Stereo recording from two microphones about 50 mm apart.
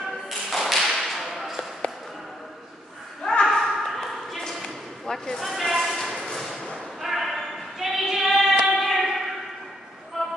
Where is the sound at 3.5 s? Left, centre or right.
Centre.